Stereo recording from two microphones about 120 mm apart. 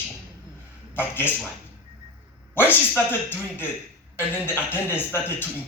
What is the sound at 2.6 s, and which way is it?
Speech, 15° left (ahead or behind).